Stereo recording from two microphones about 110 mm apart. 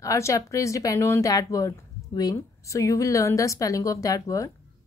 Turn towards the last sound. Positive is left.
turn(degrees=30)  # may be behind; listen again after turning